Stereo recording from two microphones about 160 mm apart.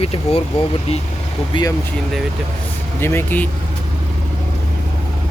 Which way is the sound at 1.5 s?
30° left (ahead or behind).